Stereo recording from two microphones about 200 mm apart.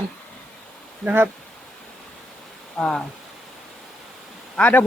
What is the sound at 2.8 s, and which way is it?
Speech, centre (ahead or behind).